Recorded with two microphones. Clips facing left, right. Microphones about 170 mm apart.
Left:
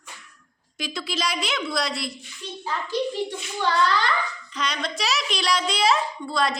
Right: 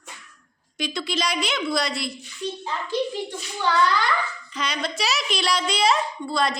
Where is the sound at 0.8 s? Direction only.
Centre (ahead or behind).